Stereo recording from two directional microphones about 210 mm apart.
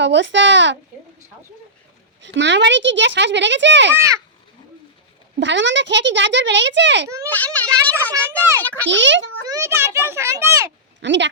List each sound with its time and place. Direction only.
0.0 s speech: 60° right (ahead or behind)
2.2 s speech: 60° right (ahead or behind)
3.9 s a child's voice: 15° right (ahead or behind)
5.4 s speech: 60° right (ahead or behind)
7.3 s speech: 10° left (ahead or behind)
8.9 s speech: 60° right (ahead or behind)
9.5 s a child's voice: 15° right (ahead or behind)
11.0 s speech: 60° right (ahead or behind)